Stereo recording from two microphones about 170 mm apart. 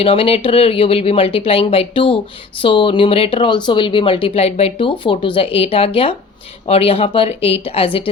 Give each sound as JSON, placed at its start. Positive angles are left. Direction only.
{"t": 0.0, "sound": "speech", "side_deg": 35}